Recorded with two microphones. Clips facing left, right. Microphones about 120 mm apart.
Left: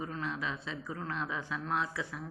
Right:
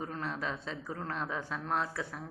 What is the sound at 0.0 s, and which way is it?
Speech, 40° right (ahead or behind).